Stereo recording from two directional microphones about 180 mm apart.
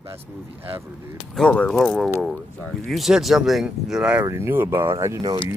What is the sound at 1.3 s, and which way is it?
Speech, 5° left (ahead or behind).